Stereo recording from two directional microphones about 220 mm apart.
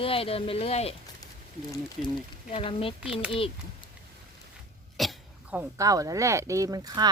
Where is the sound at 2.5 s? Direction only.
25° left (ahead or behind).